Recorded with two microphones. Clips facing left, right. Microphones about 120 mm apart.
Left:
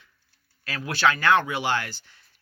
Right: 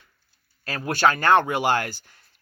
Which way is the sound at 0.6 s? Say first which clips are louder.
Right 2 dB; 45° right (ahead or behind).